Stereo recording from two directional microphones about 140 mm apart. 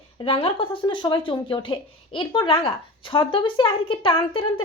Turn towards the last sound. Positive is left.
turn(degrees=40)  # may be behind; listen again after turning